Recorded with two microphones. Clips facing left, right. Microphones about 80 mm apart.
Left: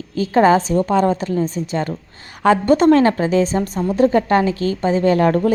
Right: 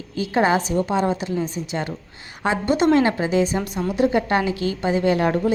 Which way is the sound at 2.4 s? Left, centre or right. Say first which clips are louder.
Left 8 dB; left.